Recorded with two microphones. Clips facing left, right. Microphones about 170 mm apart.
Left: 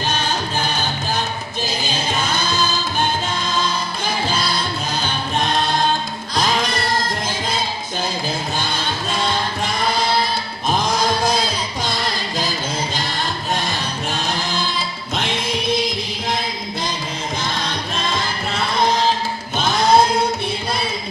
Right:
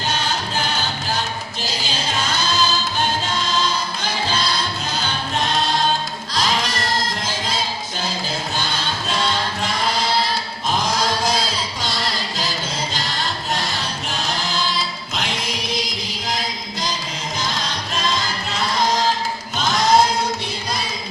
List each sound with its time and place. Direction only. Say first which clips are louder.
2.1 s music: right 1 dB; 55° left (ahead or behind)
6.3 s music: left 2 dB; 55° left (ahead or behind)
8.5 s music: left 2 dB; 50° left (ahead or behind)
17.4 s music: right 1 dB; 55° left (ahead or behind)
19.5 s choir: left 2 dB; 30° left (ahead or behind)